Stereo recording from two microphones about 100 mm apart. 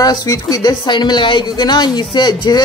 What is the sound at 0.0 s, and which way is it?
A man's voice, 40° left (ahead or behind).